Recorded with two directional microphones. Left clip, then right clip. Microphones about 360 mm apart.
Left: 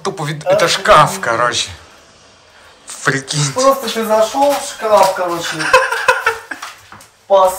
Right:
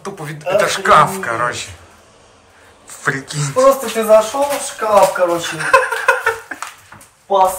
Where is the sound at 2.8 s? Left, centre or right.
Centre.